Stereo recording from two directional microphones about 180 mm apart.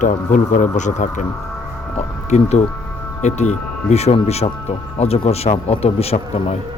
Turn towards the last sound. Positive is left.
turn(degrees=35)  # may be behind; listen again after turning